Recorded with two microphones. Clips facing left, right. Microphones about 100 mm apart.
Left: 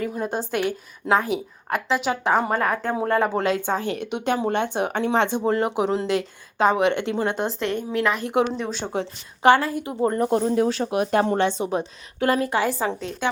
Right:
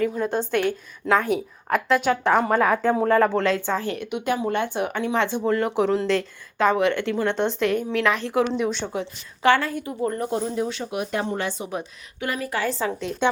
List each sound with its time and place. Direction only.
0.0 s a woman's voice: 10° left (ahead or behind)
2.3 s a woman's voice: 15° left (ahead or behind)
2.6 s a woman's voice: centre (ahead or behind); by 7.3 s 20° left (ahead or behind)
7.3 s a woman's voice: 5° left (ahead or behind)
8.2 s speech: 20° left (ahead or behind)
8.9 s a woman's voice: 35° left (ahead or behind)
9.5 s a woman's voice: 5° left (ahead or behind)
10.1 s speech: 55° left (ahead or behind)
10.7 s speech: 40° left (ahead or behind)
11.3 s speech: 30° left (ahead or behind)
12.5 s speech: 20° left (ahead or behind)